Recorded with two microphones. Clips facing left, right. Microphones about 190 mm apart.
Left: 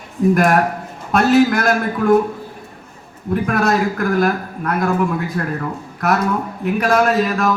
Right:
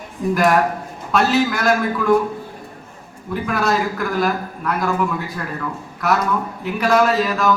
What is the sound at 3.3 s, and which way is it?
A man's voice, 50° left (ahead or behind).